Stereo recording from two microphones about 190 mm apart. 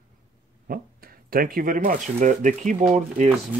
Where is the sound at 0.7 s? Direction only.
50° right (ahead or behind).